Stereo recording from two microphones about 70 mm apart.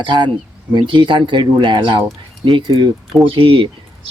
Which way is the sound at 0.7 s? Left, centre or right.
Right.